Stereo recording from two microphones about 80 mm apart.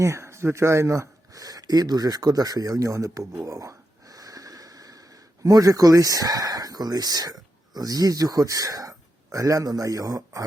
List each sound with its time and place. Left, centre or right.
0.0 s speech: right